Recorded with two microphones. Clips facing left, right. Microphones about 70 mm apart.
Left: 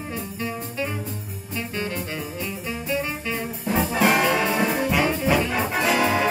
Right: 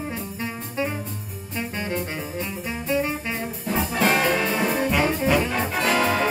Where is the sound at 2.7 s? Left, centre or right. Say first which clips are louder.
Right 3 dB; centre.